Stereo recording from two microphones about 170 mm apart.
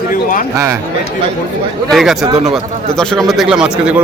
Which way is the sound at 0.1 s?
55° left (ahead or behind).